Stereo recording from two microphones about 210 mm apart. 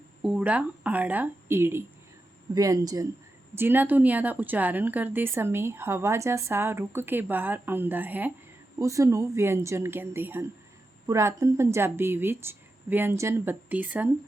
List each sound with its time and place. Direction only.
0.2 s speech: 5° right (ahead or behind)